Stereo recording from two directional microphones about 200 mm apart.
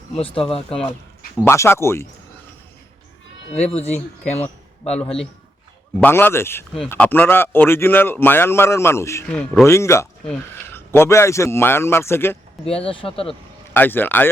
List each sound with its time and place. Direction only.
0.2 s speech: 25° left (ahead or behind)
1.4 s a man's voice: 15° left (ahead or behind)
3.5 s speech: 30° left (ahead or behind)
4.4 s a sound: 5° left (ahead or behind)
6.0 s a man's voice: 10° left (ahead or behind)
12.6 s speech: 30° left (ahead or behind)
13.7 s a man's voice: 10° left (ahead or behind)